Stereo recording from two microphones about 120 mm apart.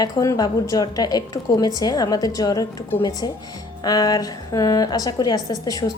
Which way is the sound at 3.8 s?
35° left (ahead or behind).